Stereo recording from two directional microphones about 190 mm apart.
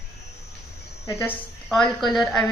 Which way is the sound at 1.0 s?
15° left (ahead or behind).